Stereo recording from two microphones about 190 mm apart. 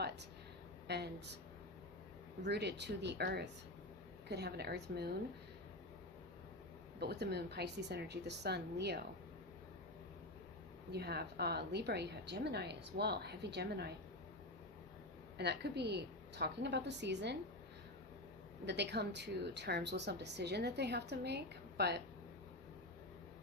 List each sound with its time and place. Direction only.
0.9 s speech: 60° right (ahead or behind)
2.4 s speech: 60° right (ahead or behind)
7.0 s speech: 60° right (ahead or behind)
10.9 s speech: 55° right (ahead or behind)
15.4 s speech: 60° right (ahead or behind)
18.6 s speech: 60° right (ahead or behind)